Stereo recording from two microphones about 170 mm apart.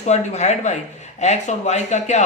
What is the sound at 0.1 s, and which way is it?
Speech, 45° left (ahead or behind).